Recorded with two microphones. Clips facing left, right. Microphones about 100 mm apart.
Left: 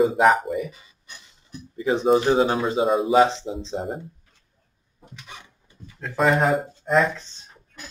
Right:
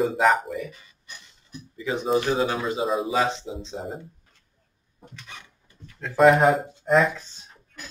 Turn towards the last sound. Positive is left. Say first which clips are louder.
# even
turn(degrees=0)  # may be behind; listen again after turning